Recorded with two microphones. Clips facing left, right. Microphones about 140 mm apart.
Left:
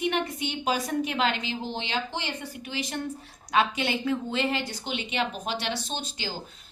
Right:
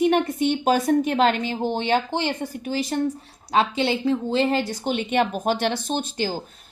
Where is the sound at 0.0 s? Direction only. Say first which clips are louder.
Right 9 dB; 45° right (ahead or behind).